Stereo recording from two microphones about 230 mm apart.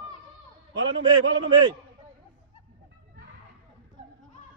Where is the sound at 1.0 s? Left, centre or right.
Centre.